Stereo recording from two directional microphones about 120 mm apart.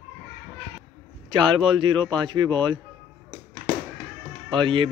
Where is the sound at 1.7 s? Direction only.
45° right (ahead or behind).